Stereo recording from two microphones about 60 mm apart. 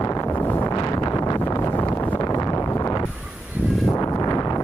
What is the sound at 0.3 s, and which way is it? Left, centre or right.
Wind noise, left.